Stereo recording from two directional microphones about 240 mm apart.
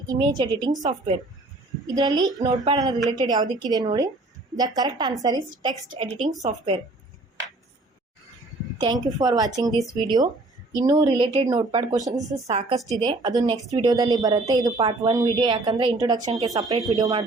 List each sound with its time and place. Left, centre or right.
0.1 s speech: centre
2.0 s speech: centre
6.0 s speech: right
8.8 s speech: centre
12.5 s speech: right
12.9 s speech: centre
16.1 s speech: right
16.5 s speech: centre